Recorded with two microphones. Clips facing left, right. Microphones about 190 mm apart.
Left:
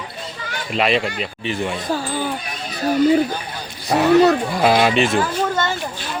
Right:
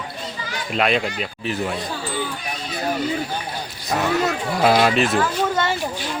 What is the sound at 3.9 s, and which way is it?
Speech, 35° left (ahead or behind).